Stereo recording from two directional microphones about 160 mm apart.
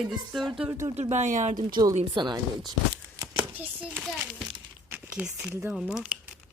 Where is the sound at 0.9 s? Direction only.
45° right (ahead or behind).